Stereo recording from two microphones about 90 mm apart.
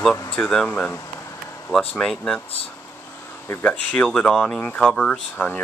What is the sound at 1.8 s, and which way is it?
Speech, 10° left (ahead or behind).